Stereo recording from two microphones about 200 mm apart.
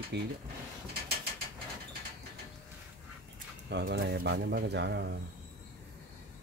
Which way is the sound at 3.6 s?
60° right (ahead or behind).